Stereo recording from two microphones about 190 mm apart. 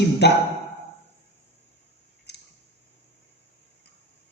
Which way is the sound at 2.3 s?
60° left (ahead or behind).